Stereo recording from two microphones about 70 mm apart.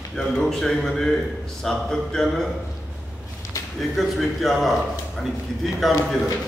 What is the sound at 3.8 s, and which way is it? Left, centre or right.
Speech, centre.